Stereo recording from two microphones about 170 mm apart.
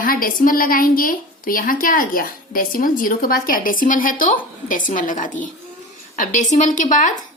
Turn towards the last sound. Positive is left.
turn(degrees=50)  # may be behind; listen again after turning